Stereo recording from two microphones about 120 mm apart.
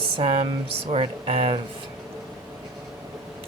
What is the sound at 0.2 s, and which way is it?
Speech, 50° right (ahead or behind).